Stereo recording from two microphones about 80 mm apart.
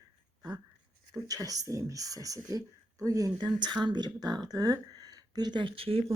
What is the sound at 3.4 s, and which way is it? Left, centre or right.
Speech, right.